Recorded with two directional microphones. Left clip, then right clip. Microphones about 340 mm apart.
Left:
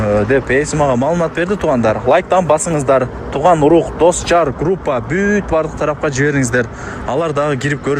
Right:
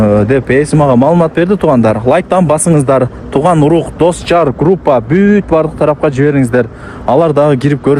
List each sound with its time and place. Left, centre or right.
0.0 s speech: centre